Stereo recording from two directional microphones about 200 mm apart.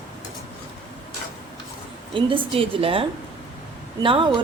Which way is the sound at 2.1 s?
25° right (ahead or behind).